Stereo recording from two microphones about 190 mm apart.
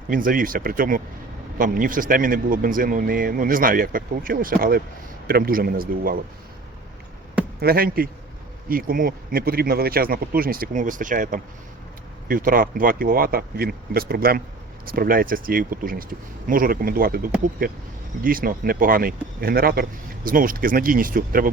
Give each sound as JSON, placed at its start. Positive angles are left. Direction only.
{"t": 0.1, "sound": "speech", "side_deg": -45}
{"t": 7.6, "sound": "speech", "side_deg": -55}
{"t": 18.2, "sound": "speech", "side_deg": -50}